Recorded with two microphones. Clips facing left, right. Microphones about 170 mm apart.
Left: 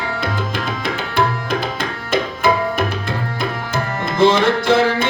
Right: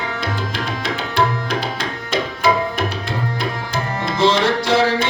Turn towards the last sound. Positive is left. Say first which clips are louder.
# left 1 dB
turn(degrees=50)  # may be behind; listen again after turning